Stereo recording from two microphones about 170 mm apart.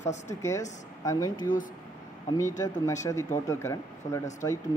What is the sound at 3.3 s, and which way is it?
Speech, 15° left (ahead or behind).